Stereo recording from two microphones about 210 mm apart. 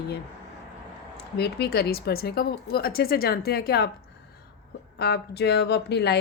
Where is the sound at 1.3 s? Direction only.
50° left (ahead or behind).